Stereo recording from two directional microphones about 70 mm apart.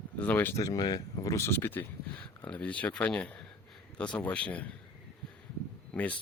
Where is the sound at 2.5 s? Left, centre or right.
Centre.